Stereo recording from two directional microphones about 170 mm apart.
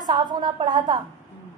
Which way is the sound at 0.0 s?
25° right (ahead or behind).